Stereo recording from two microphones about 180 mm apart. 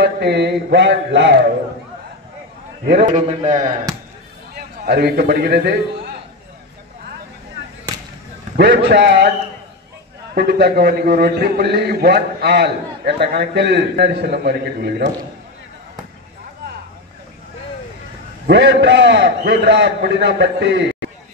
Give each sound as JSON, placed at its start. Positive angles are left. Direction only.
{"t": 0.0, "sound": "a sound", "side_deg": -65}
{"t": 2.9, "sound": "a man's voice", "side_deg": -55}
{"t": 3.2, "sound": "a man's voice", "side_deg": -40}
{"t": 4.6, "sound": "a man's voice", "side_deg": -60}
{"t": 8.5, "sound": "a man's voice", "side_deg": -75}
{"t": 10.3, "sound": "a man's voice", "side_deg": -65}
{"t": 18.5, "sound": "a man's voice", "side_deg": -80}